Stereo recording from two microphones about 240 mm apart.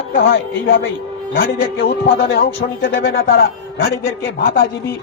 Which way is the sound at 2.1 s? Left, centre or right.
Left.